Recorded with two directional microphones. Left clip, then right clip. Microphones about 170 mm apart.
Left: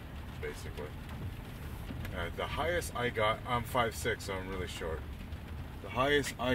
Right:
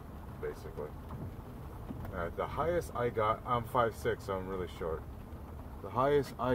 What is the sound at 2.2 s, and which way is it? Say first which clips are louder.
Speech: right 1 dB; 15° right (ahead or behind).